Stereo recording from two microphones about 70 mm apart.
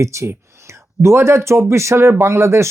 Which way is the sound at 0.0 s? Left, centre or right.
Right.